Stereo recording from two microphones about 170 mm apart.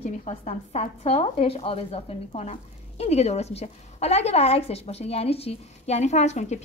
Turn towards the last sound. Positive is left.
turn(degrees=40)  # may be behind; listen again after turning